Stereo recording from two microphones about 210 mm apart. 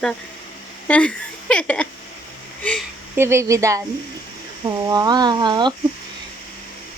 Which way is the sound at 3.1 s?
10° right (ahead or behind).